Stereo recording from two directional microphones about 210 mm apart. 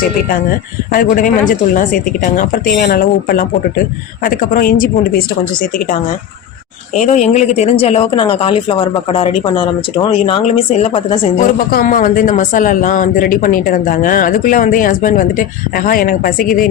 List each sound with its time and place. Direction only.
0.9 s a woman's voice: 40° left (ahead or behind)
6.9 s speech: 35° left (ahead or behind)
11.7 s speech: 45° left (ahead or behind)